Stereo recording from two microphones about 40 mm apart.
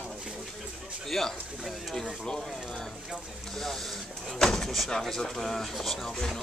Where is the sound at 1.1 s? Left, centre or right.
Centre.